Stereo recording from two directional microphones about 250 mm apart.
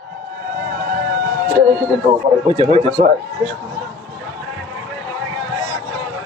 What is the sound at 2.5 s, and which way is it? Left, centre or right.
Speech, centre.